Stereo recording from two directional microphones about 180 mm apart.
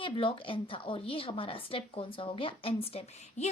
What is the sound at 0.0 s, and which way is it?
A woman's voice, 30° left (ahead or behind).